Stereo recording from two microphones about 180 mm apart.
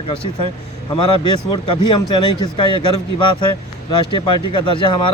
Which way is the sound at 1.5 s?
25° left (ahead or behind).